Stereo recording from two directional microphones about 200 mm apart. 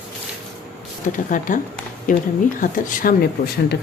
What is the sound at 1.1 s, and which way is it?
Speech, 40° left (ahead or behind).